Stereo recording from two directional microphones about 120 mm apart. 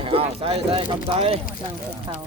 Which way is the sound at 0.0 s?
50° right (ahead or behind).